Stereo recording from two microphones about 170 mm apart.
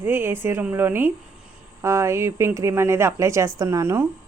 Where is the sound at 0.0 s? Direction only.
15° right (ahead or behind).